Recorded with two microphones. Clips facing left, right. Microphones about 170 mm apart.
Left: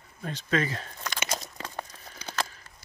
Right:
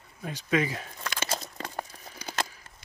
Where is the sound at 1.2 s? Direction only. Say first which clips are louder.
Right 1 dB; 30° right (ahead or behind).